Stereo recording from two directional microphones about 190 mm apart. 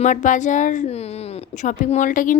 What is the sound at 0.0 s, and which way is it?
A woman's voice, 40° left (ahead or behind).